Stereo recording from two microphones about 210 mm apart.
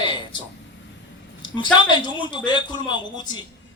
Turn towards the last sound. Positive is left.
turn(degrees=20)  # may be behind; listen again after turning